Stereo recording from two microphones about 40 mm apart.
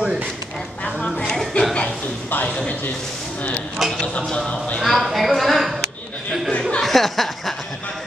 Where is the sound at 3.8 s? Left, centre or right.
Centre.